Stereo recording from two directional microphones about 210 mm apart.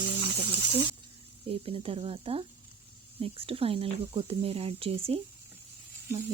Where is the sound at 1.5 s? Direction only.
25° right (ahead or behind).